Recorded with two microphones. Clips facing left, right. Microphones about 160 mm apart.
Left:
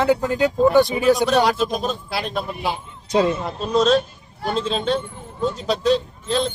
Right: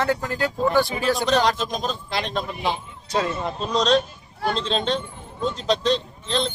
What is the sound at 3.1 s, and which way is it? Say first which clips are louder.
Speech: left 6 dB; 20° left (ahead or behind).